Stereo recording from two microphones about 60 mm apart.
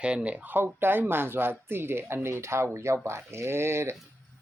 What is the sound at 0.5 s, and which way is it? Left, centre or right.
Speech, right.